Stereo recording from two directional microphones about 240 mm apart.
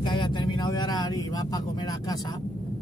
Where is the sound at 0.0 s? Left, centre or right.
Centre.